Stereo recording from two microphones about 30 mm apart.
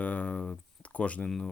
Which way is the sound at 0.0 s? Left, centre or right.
Left.